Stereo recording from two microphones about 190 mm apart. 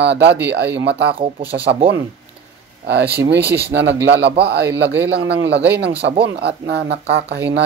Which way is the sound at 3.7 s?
65° right (ahead or behind).